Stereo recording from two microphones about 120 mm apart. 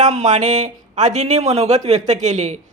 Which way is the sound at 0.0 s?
70° right (ahead or behind).